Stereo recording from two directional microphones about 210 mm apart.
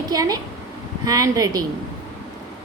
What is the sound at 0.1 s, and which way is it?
A woman's voice, 20° right (ahead or behind).